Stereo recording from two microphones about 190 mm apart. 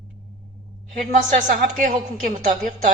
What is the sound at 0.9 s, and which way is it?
A woman's voice, 40° right (ahead or behind).